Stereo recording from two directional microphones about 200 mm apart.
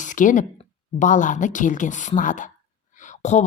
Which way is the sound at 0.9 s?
40° left (ahead or behind).